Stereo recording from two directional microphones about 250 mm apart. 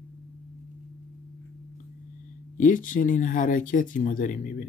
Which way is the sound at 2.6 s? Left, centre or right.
Left.